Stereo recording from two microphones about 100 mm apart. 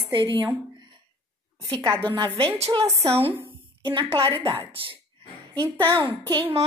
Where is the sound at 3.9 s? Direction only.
65° right (ahead or behind).